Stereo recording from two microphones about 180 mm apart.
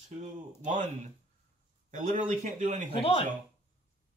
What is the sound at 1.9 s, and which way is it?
Speech, 45° right (ahead or behind).